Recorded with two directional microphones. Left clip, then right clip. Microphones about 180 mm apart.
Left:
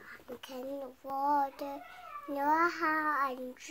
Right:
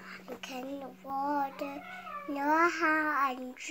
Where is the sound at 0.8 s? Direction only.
10° left (ahead or behind).